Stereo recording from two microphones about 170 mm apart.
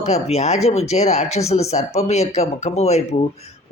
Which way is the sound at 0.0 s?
40° left (ahead or behind).